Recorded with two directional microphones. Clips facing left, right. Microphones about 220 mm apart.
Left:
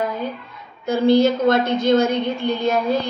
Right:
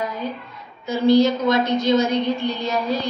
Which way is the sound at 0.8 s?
55° left (ahead or behind).